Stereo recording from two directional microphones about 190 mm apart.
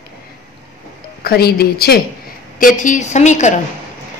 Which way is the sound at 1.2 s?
55° left (ahead or behind).